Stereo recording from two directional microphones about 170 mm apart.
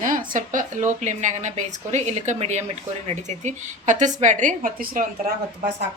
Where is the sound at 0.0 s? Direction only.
50° right (ahead or behind).